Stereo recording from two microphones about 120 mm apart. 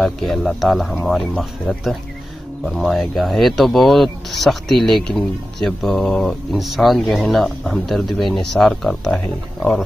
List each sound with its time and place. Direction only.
0.0 s speech: centre (ahead or behind)